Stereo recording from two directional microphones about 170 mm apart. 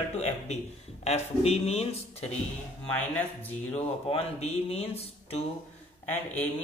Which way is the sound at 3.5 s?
40° left (ahead or behind).